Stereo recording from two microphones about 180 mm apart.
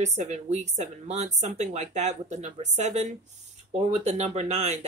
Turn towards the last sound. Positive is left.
turn(degrees=-35)  # may be behind; listen again after turning